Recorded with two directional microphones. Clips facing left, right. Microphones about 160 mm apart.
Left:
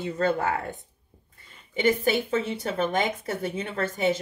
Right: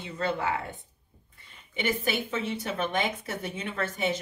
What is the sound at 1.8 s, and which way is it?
Speech, 35° left (ahead or behind).